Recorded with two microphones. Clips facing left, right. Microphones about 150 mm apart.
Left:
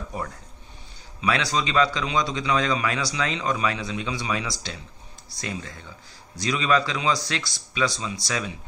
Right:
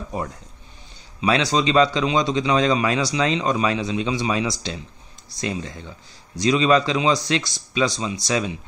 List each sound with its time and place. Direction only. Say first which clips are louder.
1.2 s a man's voice: right 5 dB; 25° right (ahead or behind)